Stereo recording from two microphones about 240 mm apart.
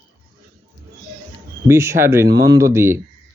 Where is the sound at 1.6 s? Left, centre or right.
Centre.